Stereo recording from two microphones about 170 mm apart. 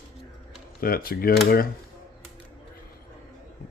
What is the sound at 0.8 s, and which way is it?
Speech, 60° left (ahead or behind).